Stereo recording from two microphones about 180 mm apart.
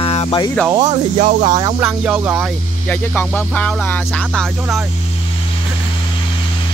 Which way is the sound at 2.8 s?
10° left (ahead or behind).